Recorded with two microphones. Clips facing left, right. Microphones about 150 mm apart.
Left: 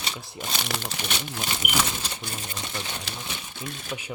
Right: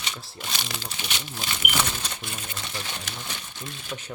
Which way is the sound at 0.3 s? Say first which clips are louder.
Left 5 dB; 45° left (ahead or behind).